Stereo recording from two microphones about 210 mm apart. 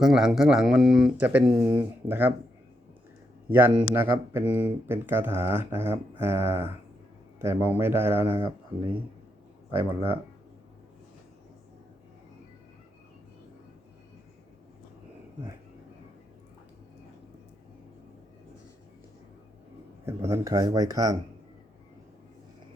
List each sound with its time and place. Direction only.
0.0 s speech: centre (ahead or behind)
3.5 s speech: 10° right (ahead or behind)
20.1 s speech: 15° right (ahead or behind)